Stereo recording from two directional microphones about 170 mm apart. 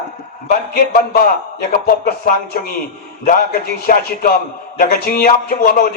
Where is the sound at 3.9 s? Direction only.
55° left (ahead or behind).